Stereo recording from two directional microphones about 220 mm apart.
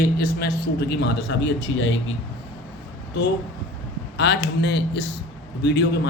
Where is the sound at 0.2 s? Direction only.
45° left (ahead or behind).